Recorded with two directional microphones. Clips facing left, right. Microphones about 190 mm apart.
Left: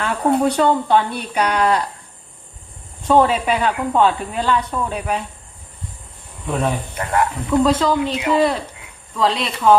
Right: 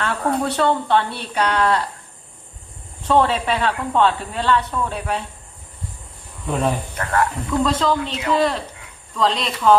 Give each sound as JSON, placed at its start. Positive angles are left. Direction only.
{"t": 0.0, "sound": "speech", "side_deg": 10}
{"t": 3.1, "sound": "speech", "side_deg": 10}
{"t": 7.0, "sound": "speech", "side_deg": 20}
{"t": 7.7, "sound": "speech", "side_deg": 10}